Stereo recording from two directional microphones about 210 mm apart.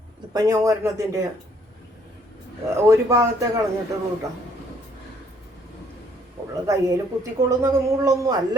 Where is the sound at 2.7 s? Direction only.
15° right (ahead or behind).